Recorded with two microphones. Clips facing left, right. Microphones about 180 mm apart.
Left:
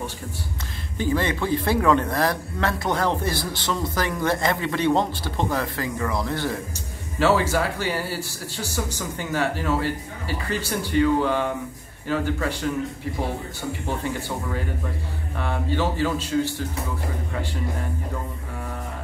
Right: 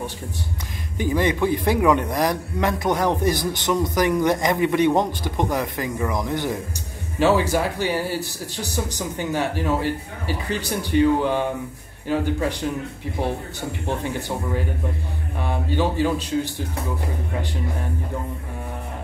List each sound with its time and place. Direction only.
0.9 s a man's voice: 15° right (ahead or behind)
15.3 s a man's voice: 15° right (ahead or behind)